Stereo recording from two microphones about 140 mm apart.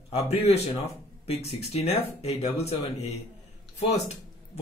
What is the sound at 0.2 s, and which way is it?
Speech, 45° left (ahead or behind).